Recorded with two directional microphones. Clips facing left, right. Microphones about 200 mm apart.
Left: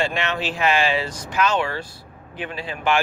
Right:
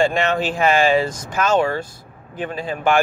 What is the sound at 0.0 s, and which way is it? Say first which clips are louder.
Speech: right 6 dB; 45° right (ahead or behind).